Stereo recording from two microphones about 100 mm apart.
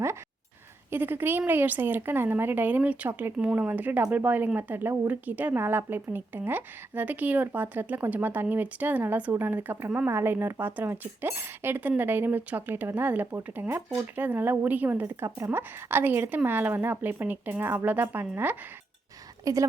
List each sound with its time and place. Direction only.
0.9 s speech: 20° right (ahead or behind)
19.5 s a woman's voice: 35° right (ahead or behind)